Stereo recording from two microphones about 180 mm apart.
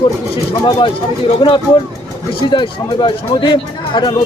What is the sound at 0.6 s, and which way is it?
A man's voice, 25° left (ahead or behind).